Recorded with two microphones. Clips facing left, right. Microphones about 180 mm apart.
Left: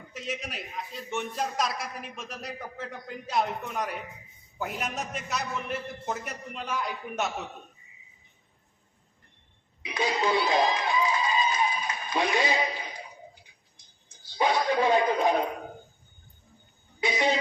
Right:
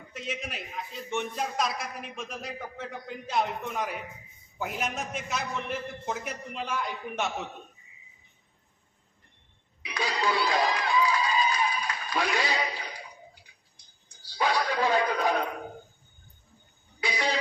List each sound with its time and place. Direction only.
0.1 s a man's voice: centre (ahead or behind)
9.8 s music: 20° left (ahead or behind)
17.0 s a sound: 20° left (ahead or behind)